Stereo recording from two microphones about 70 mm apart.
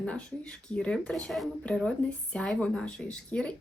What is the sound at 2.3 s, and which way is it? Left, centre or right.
Speech, centre.